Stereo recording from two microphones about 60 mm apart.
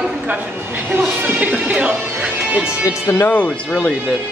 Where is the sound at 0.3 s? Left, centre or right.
Right.